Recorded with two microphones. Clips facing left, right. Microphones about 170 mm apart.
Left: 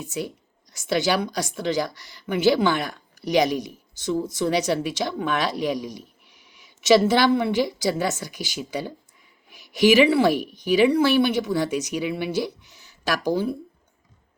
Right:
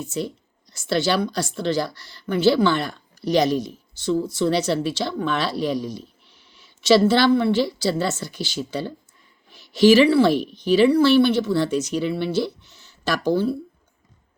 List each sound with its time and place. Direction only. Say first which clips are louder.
0.0 s speech: right 3 dB; 15° left (ahead or behind)